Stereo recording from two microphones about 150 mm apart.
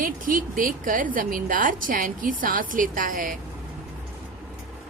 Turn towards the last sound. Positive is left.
turn(degrees=-65)  # may be behind; listen again after turning